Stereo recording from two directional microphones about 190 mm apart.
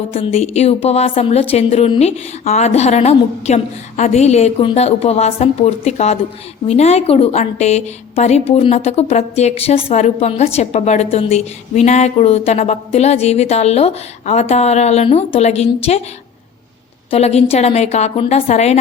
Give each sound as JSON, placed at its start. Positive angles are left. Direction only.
{"t": 0.1, "sound": "a woman's voice", "side_deg": 30}
{"t": 17.1, "sound": "a woman's voice", "side_deg": 35}